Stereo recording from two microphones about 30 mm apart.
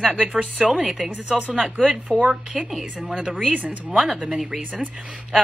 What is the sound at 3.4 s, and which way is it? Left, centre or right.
Speech, right.